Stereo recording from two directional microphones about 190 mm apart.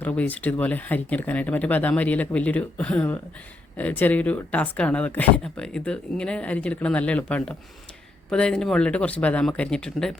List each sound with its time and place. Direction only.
0.0 s speech: 10° left (ahead or behind)